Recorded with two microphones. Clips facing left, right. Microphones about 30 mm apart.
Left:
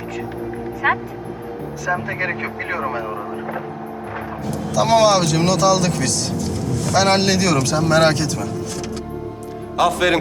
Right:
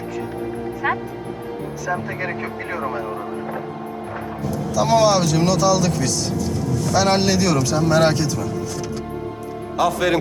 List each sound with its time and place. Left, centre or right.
0.8 s speech: left
4.4 s speech: centre
9.7 s speech: centre